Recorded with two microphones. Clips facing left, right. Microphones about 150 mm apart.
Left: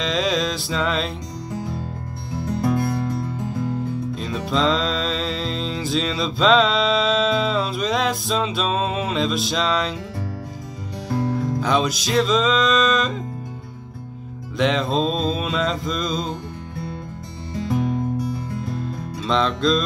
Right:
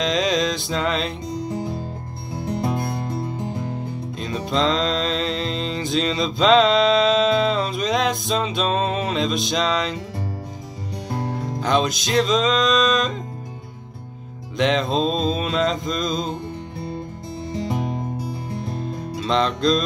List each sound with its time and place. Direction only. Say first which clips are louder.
0.0 s music: right 1 dB; centre (ahead or behind)
2.3 s music: left 2 dB; 25° right (ahead or behind)
4.2 s music: right 1 dB; centre (ahead or behind)
11.6 s mantra: right 3 dB; 5° left (ahead or behind)
14.6 s mantra: even; centre (ahead or behind)
19.1 s music: even; centre (ahead or behind)